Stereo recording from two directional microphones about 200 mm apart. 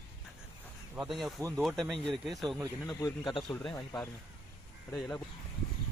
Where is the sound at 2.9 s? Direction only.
20° left (ahead or behind).